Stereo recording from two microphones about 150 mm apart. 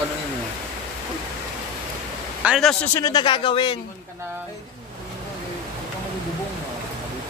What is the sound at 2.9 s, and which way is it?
Speech, 25° left (ahead or behind).